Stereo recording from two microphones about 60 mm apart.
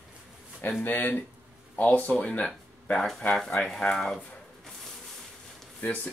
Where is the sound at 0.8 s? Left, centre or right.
Left.